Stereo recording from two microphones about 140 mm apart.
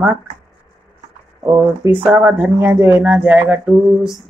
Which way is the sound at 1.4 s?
15° right (ahead or behind).